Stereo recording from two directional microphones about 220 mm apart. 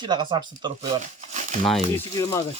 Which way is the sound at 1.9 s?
15° left (ahead or behind).